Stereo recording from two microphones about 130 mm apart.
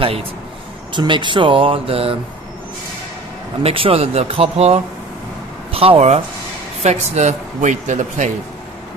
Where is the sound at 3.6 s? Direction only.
45° right (ahead or behind); by 8.3 s 70° right (ahead or behind).